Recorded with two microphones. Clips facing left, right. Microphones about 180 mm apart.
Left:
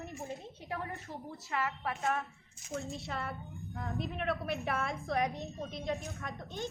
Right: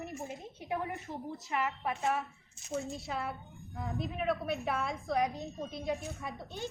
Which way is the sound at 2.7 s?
Centre (ahead or behind).